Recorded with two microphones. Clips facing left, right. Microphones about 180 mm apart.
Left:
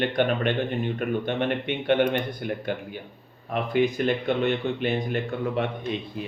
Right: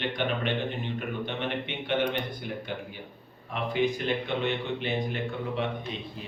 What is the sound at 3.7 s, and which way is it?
Speech, 55° left (ahead or behind).